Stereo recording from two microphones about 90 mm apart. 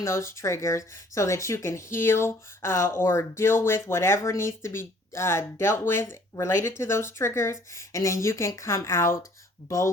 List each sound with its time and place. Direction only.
0.0 s speech: 30° left (ahead or behind)